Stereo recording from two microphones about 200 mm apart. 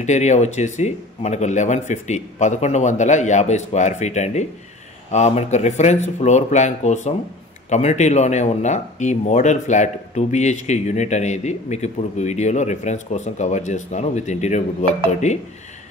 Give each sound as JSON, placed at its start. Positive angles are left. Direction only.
{"t": 0.0, "sound": "speech", "side_deg": 35}